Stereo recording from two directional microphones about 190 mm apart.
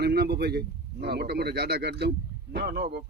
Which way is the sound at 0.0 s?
55° right (ahead or behind).